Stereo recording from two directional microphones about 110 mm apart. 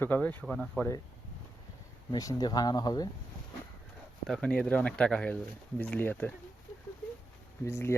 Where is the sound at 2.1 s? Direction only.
35° left (ahead or behind).